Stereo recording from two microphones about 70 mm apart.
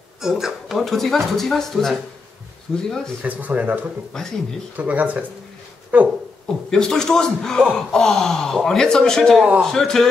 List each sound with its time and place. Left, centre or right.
0.2 s speech: centre
3.2 s speech: right
6.7 s a man's voice: centre